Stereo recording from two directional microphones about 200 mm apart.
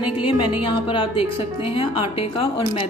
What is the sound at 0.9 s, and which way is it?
Speech, 25° left (ahead or behind).